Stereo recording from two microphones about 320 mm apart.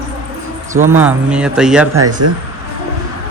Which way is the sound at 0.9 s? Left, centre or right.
Centre.